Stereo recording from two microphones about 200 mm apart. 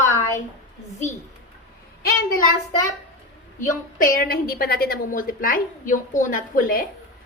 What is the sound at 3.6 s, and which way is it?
A woman's voice, 45° left (ahead or behind).